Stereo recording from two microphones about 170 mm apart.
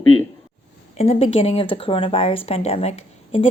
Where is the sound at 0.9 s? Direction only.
35° left (ahead or behind).